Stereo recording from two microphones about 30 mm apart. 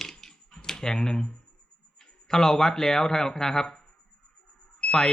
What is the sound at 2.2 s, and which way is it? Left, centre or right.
Speech, centre.